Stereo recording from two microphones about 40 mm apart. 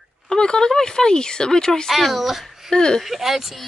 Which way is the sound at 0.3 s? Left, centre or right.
Centre.